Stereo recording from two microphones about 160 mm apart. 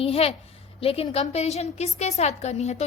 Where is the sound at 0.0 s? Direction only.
40° left (ahead or behind).